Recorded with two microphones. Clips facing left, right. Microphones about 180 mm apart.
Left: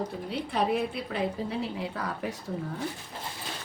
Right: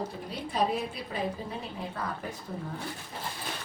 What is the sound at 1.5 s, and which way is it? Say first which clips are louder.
Speech: left 5 dB; 85° left.